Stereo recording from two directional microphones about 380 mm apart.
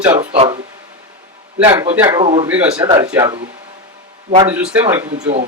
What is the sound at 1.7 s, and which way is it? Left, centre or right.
Speech, centre.